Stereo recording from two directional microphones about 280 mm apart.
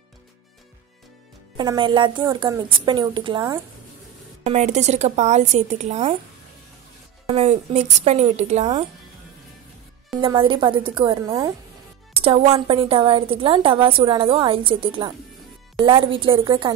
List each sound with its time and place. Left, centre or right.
1.6 s a woman's voice: centre
7.2 s a woman's voice: right
10.2 s a woman's voice: centre